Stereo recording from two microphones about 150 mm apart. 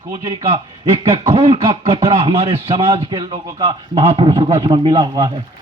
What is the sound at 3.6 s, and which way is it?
A man's voice, 40° right (ahead or behind).